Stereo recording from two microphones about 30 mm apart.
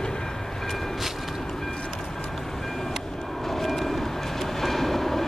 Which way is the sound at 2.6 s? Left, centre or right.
Centre.